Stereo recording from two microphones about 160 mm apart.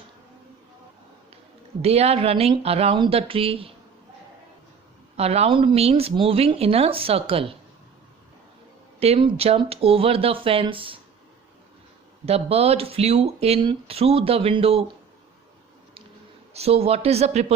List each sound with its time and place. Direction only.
1.8 s speech: 40° right (ahead or behind)
5.1 s speech: 40° right (ahead or behind)
9.0 s speech: 35° right (ahead or behind)
12.2 s speech: 40° right (ahead or behind)
16.6 s speech: 40° right (ahead or behind)